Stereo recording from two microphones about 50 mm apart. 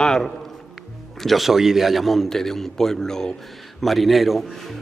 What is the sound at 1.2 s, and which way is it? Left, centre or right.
A man's voice, centre.